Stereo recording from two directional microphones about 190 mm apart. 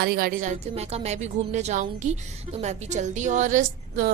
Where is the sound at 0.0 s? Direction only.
55° right (ahead or behind).